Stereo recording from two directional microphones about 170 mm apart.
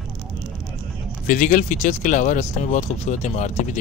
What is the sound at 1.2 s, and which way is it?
Speech, 55° left (ahead or behind).